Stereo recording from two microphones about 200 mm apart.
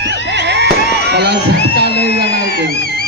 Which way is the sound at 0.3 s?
60° right (ahead or behind).